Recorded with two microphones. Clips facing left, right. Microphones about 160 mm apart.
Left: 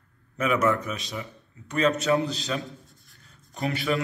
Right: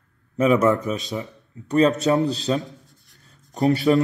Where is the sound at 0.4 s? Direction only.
30° right (ahead or behind).